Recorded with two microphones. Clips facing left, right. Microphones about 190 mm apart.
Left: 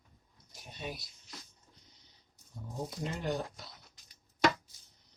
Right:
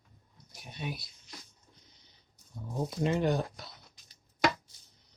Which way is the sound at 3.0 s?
70° right (ahead or behind).